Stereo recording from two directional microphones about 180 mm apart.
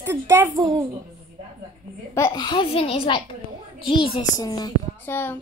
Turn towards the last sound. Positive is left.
turn(degrees=10)  # may be behind; listen again after turning